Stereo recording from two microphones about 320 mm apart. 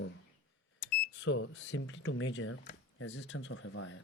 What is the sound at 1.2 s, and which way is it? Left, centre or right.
Speech, left.